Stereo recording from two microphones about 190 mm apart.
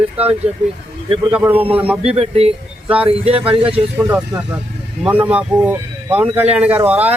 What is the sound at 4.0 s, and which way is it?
Speech, 10° right (ahead or behind).